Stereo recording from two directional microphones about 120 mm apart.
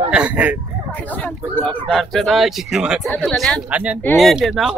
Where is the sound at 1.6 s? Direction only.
5° left (ahead or behind).